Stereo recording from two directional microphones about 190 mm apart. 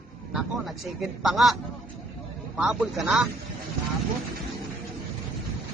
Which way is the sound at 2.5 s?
5° right (ahead or behind).